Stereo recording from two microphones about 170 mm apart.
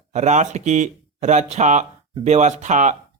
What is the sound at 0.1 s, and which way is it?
Speech, 45° right (ahead or behind).